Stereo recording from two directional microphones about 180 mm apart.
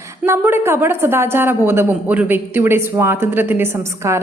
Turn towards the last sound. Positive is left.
turn(degrees=-15)  # may be behind; listen again after turning